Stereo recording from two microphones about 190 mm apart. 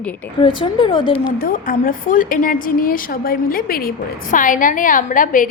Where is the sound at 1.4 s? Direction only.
45° left (ahead or behind).